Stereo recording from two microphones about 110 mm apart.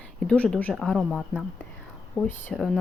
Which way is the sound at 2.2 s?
20° left (ahead or behind).